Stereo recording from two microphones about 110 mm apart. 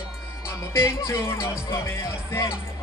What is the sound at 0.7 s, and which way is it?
Speech, 25° left (ahead or behind).